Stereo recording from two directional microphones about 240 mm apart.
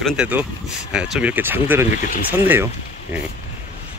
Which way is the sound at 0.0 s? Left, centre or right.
Centre.